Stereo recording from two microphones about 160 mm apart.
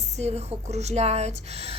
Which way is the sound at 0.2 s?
45° right (ahead or behind).